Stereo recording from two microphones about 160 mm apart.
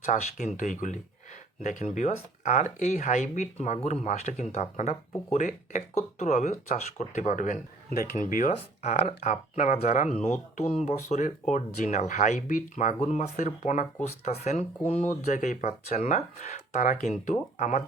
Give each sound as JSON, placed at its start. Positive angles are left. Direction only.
{"t": 0.0, "sound": "speech", "side_deg": 50}